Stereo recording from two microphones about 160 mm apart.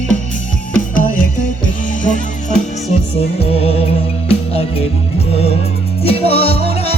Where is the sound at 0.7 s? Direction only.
55° left (ahead or behind).